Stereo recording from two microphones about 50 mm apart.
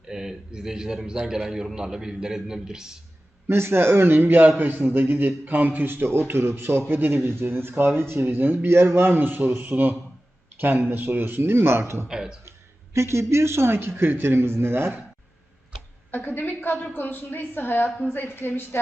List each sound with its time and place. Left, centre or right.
0.1 s a man's voice: centre
3.4 s a man's voice: right
8.2 s a man's voice: right
12.0 s a man's voice: centre
12.9 s a man's voice: right
16.1 s a woman's voice: left